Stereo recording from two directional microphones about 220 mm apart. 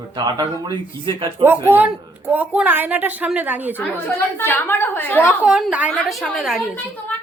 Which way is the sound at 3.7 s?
10° left (ahead or behind).